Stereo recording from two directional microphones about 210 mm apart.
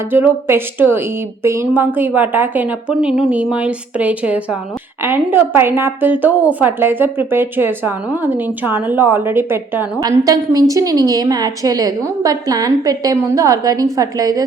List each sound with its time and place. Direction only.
0.1 s a woman's voice: 10° right (ahead or behind)